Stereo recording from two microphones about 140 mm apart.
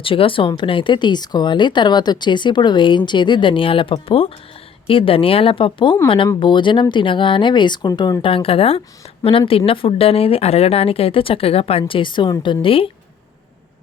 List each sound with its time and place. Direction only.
0.0 s speech: 40° left (ahead or behind)